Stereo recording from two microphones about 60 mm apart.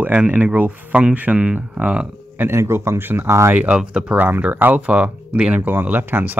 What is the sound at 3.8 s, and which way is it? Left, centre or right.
Speech, centre.